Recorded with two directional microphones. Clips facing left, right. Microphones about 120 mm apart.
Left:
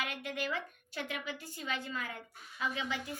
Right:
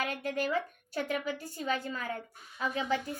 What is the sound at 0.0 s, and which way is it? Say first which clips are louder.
A woman's voice: right 5 dB; 40° right (ahead or behind).